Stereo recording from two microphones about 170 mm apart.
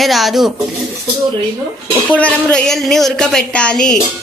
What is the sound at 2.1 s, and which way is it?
Speech, 10° left (ahead or behind).